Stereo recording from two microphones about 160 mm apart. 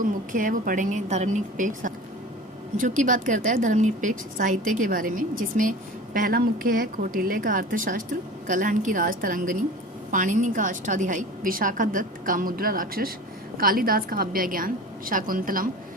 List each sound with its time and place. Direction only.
0.3 s a woman's voice: 55° right (ahead or behind)